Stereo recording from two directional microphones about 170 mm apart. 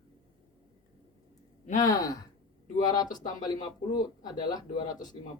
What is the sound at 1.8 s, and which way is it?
Speech, 20° left (ahead or behind).